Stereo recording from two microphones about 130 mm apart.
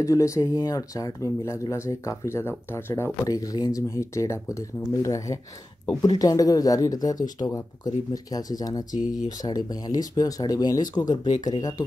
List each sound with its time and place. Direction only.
0.0 s speech: 25° left (ahead or behind)
8.9 s speech: 75° left (ahead or behind)
9.4 s speech: 30° left (ahead or behind)